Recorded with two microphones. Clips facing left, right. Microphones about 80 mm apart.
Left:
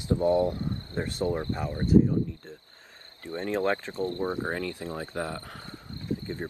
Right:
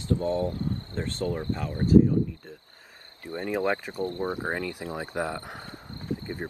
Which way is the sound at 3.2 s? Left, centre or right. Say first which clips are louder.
Even; centre.